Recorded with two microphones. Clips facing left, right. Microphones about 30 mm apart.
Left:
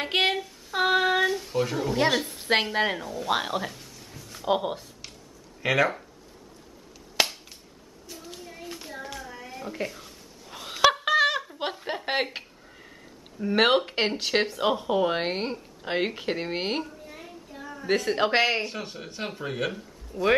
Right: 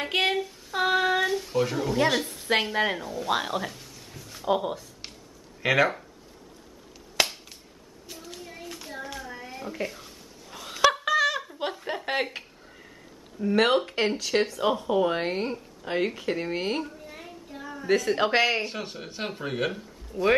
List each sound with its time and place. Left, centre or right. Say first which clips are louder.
0.0 s female singing: left 1 dB; centre
0.4 s a sound: even; centre
2.0 s speech: left 1 dB; centre
4.5 s speech: even; centre
5.6 s speech: right 1 dB; centre
8.2 s child singing: right 1 dB; centre
8.6 s hands: even; centre
9.3 s a sound: even; centre; by 11.4 s left
12.1 s speech: left 1 dB; centre
16.8 s child singing: right 1 dB; centre
17.8 s speech: right 1 dB; centre
18.7 s speech: right 1 dB; centre